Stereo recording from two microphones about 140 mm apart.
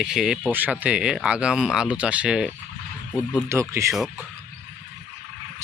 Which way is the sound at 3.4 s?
20° right (ahead or behind).